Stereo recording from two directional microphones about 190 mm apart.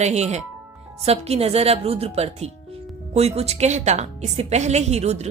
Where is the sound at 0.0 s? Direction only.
35° right (ahead or behind).